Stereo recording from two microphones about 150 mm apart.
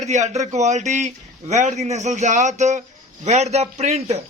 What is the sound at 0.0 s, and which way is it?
A man's voice, 50° right (ahead or behind).